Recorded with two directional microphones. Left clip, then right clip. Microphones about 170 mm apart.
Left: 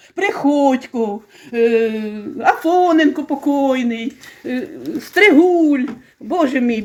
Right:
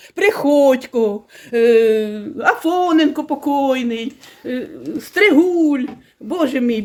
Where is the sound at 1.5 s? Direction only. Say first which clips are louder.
Right 3 dB; 50° right (ahead or behind).